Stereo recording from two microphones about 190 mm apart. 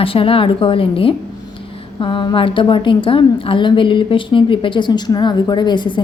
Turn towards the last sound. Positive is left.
turn(degrees=25)  # may be behind; listen again after turning